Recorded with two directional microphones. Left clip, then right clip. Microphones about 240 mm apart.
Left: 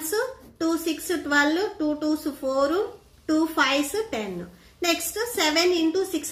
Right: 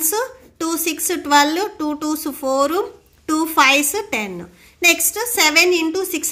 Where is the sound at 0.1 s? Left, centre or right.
Right.